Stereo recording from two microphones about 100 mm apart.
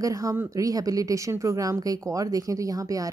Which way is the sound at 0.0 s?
35° right (ahead or behind).